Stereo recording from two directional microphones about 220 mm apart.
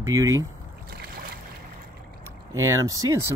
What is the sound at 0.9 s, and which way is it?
Boat, 45° right (ahead or behind).